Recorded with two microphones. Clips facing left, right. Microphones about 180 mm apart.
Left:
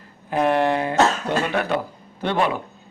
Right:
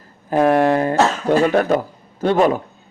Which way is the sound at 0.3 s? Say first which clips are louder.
Right 5 dB; 45° right (ahead or behind).